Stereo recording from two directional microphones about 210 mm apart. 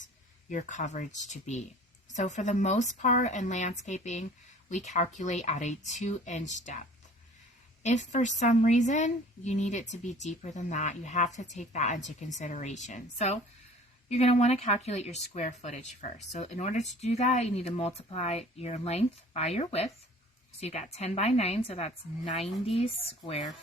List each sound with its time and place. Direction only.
0.5 s speech: 35° left (ahead or behind)